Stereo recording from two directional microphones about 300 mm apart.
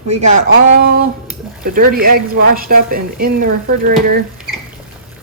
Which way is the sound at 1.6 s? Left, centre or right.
Right.